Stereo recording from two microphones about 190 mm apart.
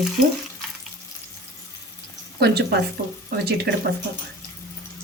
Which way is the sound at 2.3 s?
60° right (ahead or behind).